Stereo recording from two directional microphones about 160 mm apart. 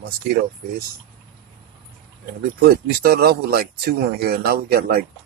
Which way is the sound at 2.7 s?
75° right (ahead or behind).